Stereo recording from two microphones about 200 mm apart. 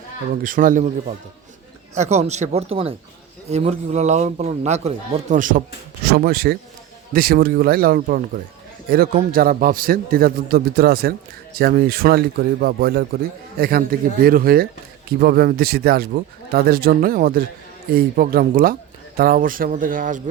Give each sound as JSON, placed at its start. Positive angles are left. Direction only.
{"t": 0.4, "sound": "speech", "side_deg": -40}